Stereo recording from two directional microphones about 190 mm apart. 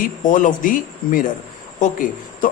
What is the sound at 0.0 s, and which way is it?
A man's voice, 45° left (ahead or behind).